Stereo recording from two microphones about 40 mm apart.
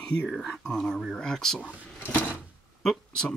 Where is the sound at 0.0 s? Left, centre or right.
Left.